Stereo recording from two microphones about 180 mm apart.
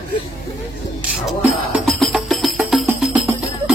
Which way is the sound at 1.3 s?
Centre (ahead or behind).